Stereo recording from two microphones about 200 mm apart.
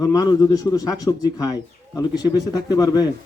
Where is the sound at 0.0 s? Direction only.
20° left (ahead or behind).